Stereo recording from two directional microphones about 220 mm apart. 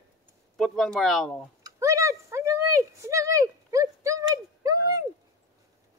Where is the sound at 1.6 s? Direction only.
15° right (ahead or behind).